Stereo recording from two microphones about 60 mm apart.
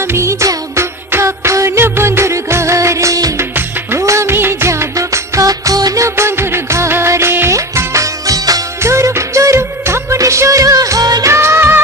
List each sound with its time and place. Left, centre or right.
0.0 s music: right
4.0 s music: right
4.4 s music: right
6.0 s music of bollywood: right
7.5 s music: right
8.8 s music of bollywood: right
10.1 s music: right
11.3 s music of bollywood: right